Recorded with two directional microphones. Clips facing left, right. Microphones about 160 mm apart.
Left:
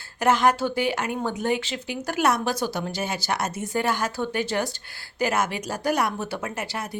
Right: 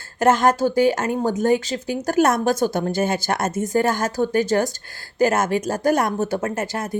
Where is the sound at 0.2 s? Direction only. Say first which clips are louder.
Right 4 dB; 45° right (ahead or behind).